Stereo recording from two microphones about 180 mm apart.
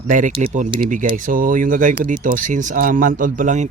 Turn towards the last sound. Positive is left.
turn(degrees=-45)  # may be behind; listen again after turning